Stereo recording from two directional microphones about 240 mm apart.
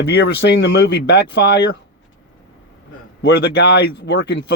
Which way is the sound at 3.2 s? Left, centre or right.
Left.